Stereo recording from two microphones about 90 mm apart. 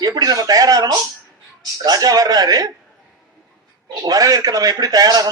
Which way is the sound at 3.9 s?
45° right (ahead or behind).